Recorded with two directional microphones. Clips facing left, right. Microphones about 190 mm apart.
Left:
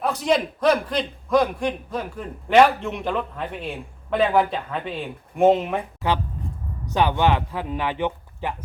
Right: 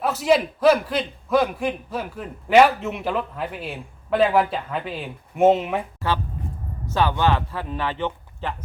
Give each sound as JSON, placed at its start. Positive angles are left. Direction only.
{"t": 0.0, "sound": "a man's voice", "side_deg": -5}
{"t": 6.8, "sound": "a man's voice", "side_deg": 15}